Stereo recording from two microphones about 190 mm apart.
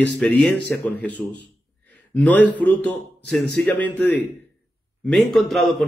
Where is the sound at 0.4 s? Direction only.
5° left (ahead or behind).